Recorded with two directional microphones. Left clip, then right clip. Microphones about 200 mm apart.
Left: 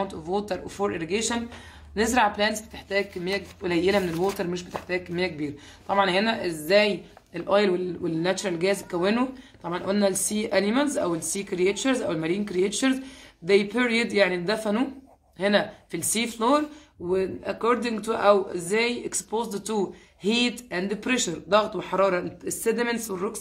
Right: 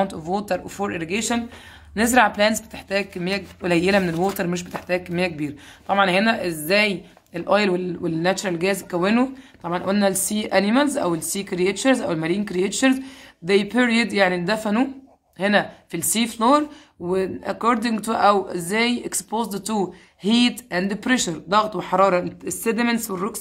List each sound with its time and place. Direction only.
0.0 s speech: 40° right (ahead or behind)